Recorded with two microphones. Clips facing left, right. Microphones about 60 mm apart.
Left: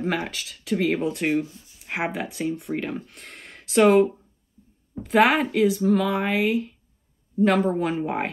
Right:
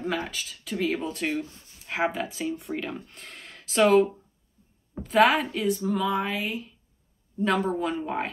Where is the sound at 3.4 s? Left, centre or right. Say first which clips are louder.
Left 4 dB; left.